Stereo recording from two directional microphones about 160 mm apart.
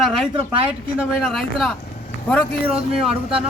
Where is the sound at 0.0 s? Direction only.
Centre (ahead or behind).